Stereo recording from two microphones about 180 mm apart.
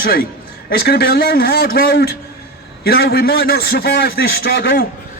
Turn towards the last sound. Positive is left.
turn(degrees=65)  # may be behind; listen again after turning